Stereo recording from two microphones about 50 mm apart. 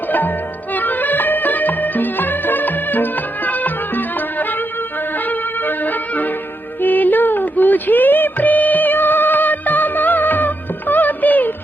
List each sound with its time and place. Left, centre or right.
0.1 s music: left